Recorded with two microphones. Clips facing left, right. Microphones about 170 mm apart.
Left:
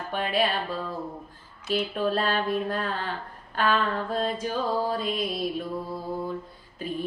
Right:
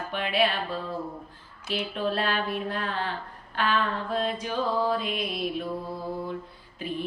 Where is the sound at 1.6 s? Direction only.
45° left (ahead or behind).